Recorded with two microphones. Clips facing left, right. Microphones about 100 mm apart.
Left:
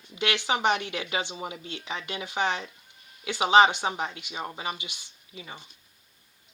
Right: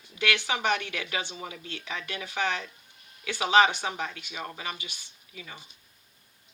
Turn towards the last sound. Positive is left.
turn(degrees=25)  # may be behind; listen again after turning